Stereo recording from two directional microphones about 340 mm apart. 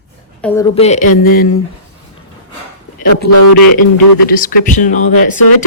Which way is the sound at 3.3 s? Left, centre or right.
Left.